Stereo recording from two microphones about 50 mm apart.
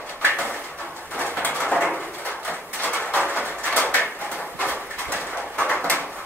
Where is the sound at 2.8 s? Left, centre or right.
Left.